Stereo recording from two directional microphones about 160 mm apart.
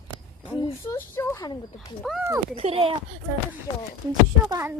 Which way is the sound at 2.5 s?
40° right (ahead or behind).